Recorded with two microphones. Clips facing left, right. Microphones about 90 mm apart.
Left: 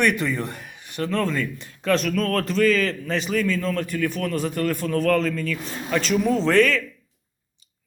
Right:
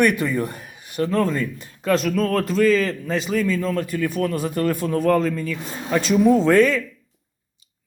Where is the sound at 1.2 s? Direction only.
35° right (ahead or behind).